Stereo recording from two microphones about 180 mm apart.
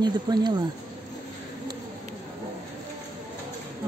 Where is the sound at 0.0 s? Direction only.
25° right (ahead or behind).